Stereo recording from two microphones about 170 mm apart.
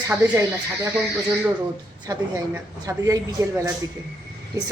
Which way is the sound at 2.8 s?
20° right (ahead or behind).